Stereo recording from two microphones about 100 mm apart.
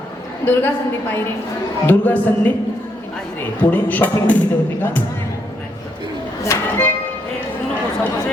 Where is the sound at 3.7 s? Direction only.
15° left (ahead or behind).